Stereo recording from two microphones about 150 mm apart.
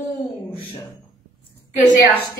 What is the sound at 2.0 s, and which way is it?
Speech, 10° left (ahead or behind).